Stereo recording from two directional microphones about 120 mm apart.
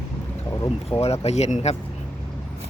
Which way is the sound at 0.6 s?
55° left (ahead or behind).